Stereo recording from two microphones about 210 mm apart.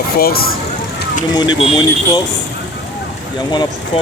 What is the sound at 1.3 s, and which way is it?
Speech, 20° left (ahead or behind).